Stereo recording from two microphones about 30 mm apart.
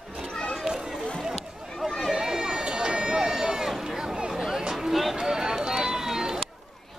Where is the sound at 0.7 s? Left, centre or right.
Right.